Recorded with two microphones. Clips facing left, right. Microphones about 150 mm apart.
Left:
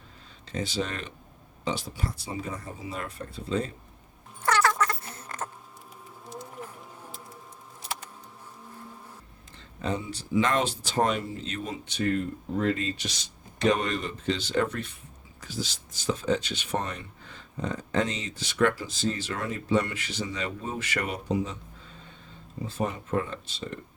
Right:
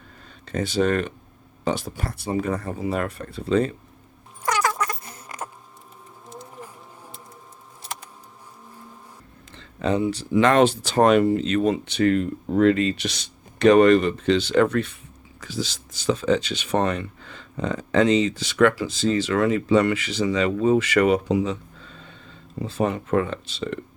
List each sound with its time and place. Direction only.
0.4 s speech: 55° right (ahead or behind); by 3.7 s 75° right (ahead or behind)
4.4 s a sound: 15° right (ahead or behind)
9.6 s speech: 90° right